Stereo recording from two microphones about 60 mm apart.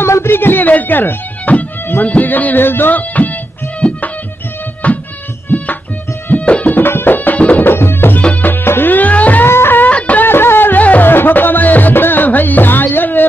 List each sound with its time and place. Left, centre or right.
0.0 s music: left
4.8 s music: left
6.2 s music: left
6.8 s music: left
7.6 s music: left
8.2 s music: left
8.5 s music: left
9.5 s music: left
9.8 s music: left
10.2 s music: left